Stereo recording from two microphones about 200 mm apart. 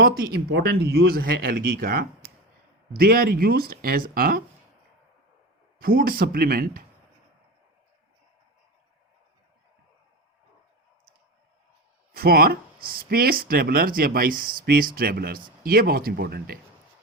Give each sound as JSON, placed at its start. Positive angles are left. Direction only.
{"t": 0.0, "sound": "speech", "side_deg": -50}
{"t": 5.8, "sound": "speech", "side_deg": -45}
{"t": 12.1, "sound": "speech", "side_deg": -50}